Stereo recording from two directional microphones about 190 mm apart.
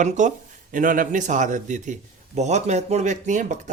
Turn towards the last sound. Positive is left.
turn(degrees=-40)  # may be behind; listen again after turning